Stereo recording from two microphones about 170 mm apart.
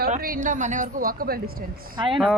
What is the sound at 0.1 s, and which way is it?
A woman's voice, 50° right (ahead or behind).